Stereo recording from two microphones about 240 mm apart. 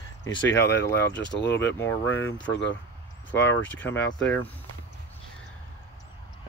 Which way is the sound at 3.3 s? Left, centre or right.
Centre.